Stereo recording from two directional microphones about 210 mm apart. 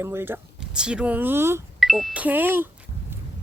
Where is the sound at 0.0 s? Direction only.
10° right (ahead or behind).